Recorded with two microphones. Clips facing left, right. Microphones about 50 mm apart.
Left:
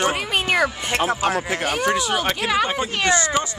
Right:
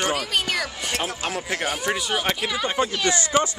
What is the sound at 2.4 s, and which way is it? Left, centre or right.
Speech, left.